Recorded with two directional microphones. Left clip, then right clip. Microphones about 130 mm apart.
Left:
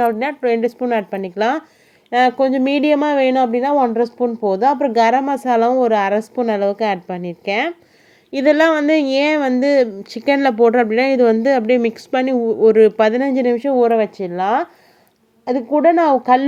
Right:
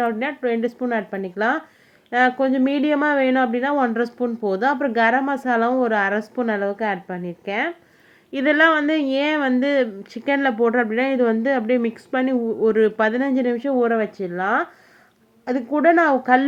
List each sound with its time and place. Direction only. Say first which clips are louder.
0.0 s a woman's voice: left 5 dB; 60° left (ahead or behind)
0.4 s a woman's voice: left 6 dB; 40° left (ahead or behind)
3.8 s a woman's voice: left 5 dB; 30° left (ahead or behind); by 11.7 s 50° left (ahead or behind)
12.1 s a woman's voice: left 4 dB; 40° left (ahead or behind)
14.3 s speech: left 4 dB; 20° right (ahead or behind)
15.4 s speech: left 4 dB; 35° left (ahead or behind)